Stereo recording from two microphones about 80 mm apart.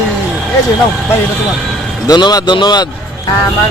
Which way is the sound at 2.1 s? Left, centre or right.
Left.